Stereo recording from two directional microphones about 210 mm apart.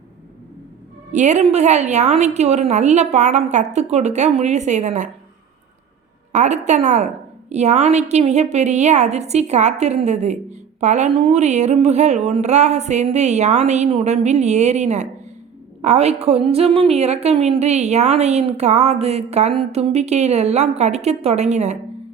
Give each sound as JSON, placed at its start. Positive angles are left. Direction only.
{"t": 1.1, "sound": "a woman's voice", "side_deg": -35}
{"t": 6.3, "sound": "a woman's voice", "side_deg": -35}